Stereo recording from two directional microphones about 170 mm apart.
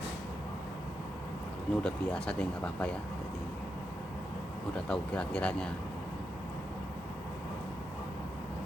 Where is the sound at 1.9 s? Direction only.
5° left (ahead or behind).